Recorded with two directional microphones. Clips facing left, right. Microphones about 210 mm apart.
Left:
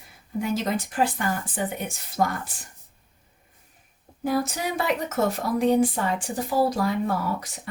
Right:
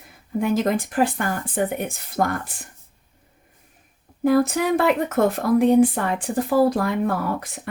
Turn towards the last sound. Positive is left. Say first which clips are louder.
# right 3 dB
turn(degrees=-55)  # may be behind; listen again after turning